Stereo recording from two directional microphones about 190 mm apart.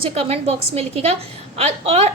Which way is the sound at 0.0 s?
35° right (ahead or behind).